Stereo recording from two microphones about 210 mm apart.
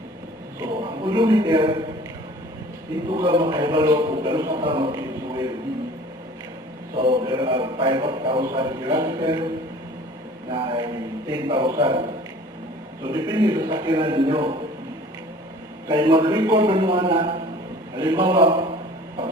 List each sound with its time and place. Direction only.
0.6 s a man's voice: 20° right (ahead or behind)
3.1 s a man's voice: 25° right (ahead or behind)
6.9 s a man's voice: 25° right (ahead or behind)
10.5 s a man's voice: 25° right (ahead or behind)
15.9 s a man's voice: 20° right (ahead or behind)